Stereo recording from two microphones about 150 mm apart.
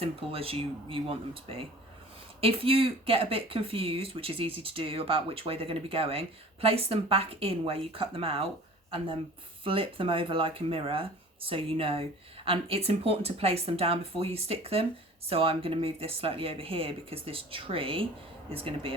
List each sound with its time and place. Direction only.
0.0 s speech: 40° right (ahead or behind)
9.6 s speech: 35° right (ahead or behind)